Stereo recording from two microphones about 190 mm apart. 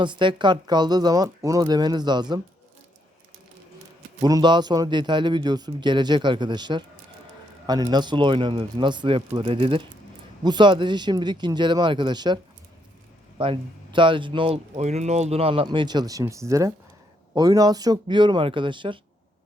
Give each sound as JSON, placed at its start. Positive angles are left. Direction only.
{"t": 0.0, "sound": "speech", "side_deg": -25}
{"t": 4.2, "sound": "speech", "side_deg": -20}
{"t": 13.4, "sound": "speech", "side_deg": -25}